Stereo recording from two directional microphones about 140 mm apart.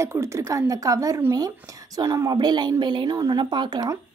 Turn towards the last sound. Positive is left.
turn(degrees=-30)  # may be behind; listen again after turning